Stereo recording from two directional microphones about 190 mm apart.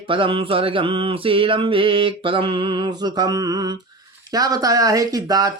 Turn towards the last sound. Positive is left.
turn(degrees=-20)  # may be behind; listen again after turning